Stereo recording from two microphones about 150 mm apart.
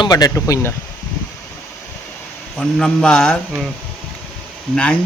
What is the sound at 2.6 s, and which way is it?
Speech, 5° left (ahead or behind).